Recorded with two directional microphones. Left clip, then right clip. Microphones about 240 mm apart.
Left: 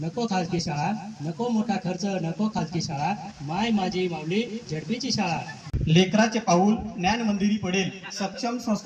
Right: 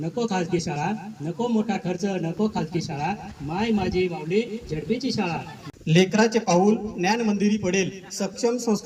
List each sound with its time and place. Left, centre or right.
0.2 s a man's voice: centre